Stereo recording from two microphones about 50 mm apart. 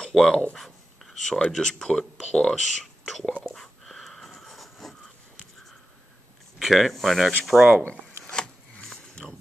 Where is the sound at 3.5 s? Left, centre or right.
Centre.